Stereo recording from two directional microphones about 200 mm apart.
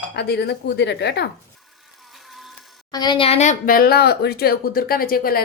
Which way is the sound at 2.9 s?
20° left (ahead or behind).